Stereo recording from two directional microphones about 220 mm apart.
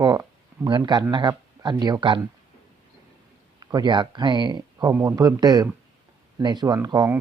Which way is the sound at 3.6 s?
15° right (ahead or behind).